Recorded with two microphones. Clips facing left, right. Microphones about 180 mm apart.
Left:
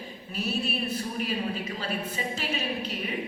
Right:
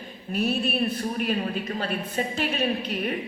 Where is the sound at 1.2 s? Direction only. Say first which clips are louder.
Right 4 dB; 55° right (ahead or behind).